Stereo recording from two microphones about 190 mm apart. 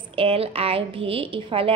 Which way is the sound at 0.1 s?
30° right (ahead or behind).